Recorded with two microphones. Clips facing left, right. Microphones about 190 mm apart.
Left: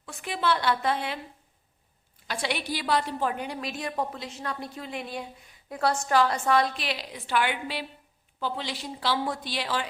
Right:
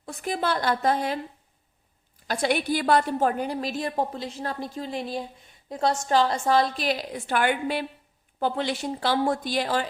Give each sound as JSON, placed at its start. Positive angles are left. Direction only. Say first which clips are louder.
{"t": 0.0, "sound": "a woman's voice", "louder": "right 2 dB", "side_deg": -40}
{"t": 2.2, "sound": "a woman's voice", "louder": "right 6 dB", "side_deg": -45}
{"t": 6.7, "sound": "a woman's voice", "louder": "right 6 dB", "side_deg": -45}